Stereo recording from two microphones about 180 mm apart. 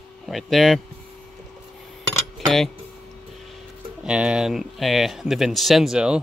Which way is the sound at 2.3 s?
Centre (ahead or behind).